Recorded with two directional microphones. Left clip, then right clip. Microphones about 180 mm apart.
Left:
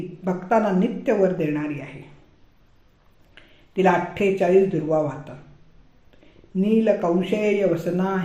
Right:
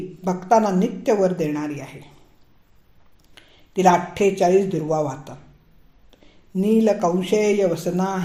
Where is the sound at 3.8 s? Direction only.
35° right (ahead or behind).